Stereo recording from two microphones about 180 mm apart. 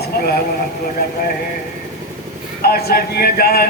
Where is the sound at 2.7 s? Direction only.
60° left (ahead or behind).